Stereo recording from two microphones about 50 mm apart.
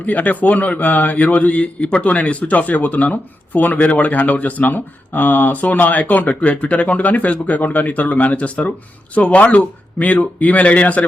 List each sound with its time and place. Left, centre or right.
0.0 s speech: left